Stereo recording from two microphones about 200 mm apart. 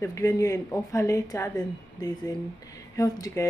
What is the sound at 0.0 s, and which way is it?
Speech, 15° left (ahead or behind).